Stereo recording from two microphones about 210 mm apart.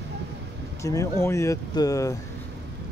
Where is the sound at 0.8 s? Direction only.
15° left (ahead or behind).